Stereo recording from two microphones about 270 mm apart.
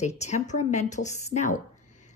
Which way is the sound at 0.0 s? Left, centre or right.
Left.